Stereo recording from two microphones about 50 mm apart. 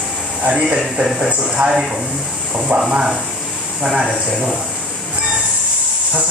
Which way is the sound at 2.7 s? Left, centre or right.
Centre.